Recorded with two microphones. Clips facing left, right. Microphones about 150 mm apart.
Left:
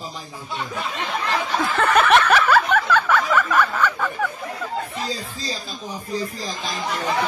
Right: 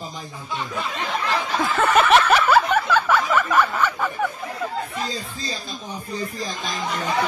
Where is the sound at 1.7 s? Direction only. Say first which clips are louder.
Even; centre (ahead or behind).